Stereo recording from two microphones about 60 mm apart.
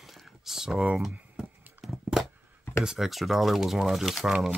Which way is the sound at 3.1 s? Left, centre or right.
Centre.